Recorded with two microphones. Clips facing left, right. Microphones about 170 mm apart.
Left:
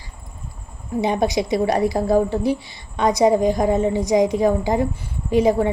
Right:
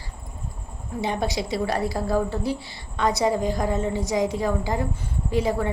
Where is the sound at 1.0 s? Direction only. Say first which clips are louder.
Left 6 dB; 15° left (ahead or behind).